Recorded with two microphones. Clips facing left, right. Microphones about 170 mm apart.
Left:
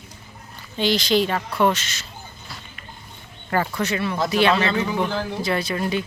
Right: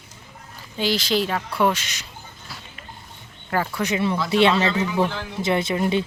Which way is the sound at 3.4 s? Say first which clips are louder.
Left 1 dB; centre (ahead or behind).